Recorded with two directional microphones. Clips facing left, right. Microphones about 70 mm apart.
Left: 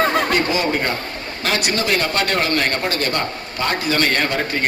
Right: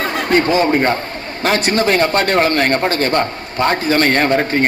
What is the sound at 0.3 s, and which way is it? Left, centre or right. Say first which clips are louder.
A man's voice: right 5 dB; right.